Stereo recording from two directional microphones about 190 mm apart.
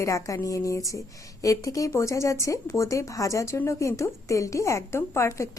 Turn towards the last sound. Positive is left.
turn(degrees=15)  # may be behind; listen again after turning